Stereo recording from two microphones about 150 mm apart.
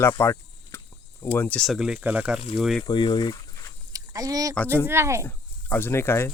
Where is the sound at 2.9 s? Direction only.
30° left (ahead or behind).